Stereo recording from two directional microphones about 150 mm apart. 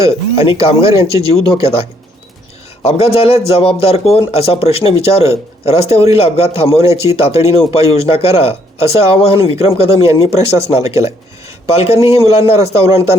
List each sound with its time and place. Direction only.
0.1 s speech: 40° left (ahead or behind)